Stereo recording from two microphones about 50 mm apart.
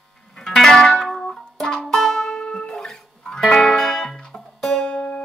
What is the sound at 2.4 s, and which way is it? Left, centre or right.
Music, left.